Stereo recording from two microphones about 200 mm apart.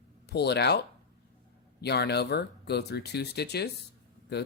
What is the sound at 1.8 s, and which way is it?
Speech, 55° left (ahead or behind).